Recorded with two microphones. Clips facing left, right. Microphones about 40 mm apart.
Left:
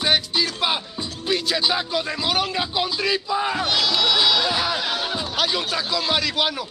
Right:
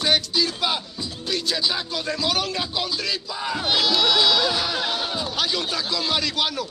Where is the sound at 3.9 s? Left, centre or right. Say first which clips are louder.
Even; centre.